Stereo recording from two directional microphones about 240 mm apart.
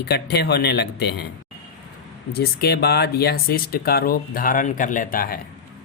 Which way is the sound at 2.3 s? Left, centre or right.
Left.